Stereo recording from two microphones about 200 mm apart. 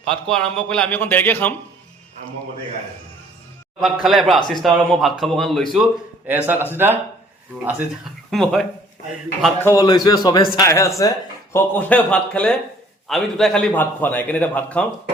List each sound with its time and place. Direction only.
0.1 s a man's voice: 5° left (ahead or behind)
3.8 s speech: centre (ahead or behind)
6.2 s speech: 10° right (ahead or behind)
9.6 s a man's voice: 15° left (ahead or behind)